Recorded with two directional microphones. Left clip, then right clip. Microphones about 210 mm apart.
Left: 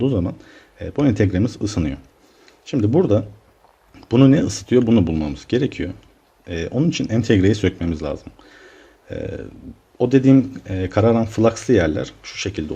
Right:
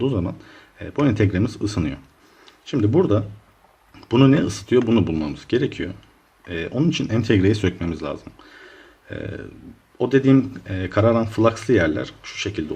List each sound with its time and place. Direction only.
0.0 s speech: 15° left (ahead or behind)